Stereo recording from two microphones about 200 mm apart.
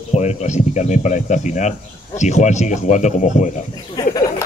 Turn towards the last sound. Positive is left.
turn(degrees=20)  # may be behind; listen again after turning